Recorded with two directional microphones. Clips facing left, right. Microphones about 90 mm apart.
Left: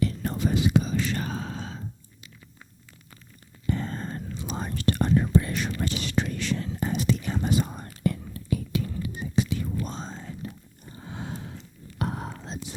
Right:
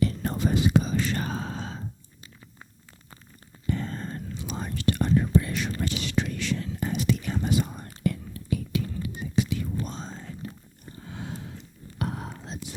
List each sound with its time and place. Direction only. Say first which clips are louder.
0.0 s whispering: right 1 dB; 40° right (ahead or behind)
3.7 s whispering: left 1 dB; 35° left (ahead or behind)
10.4 s biting: even; 30° left (ahead or behind)
11.0 s a sound: left 1 dB; 30° left (ahead or behind)
11.9 s whispering: left 1 dB; 35° left (ahead or behind)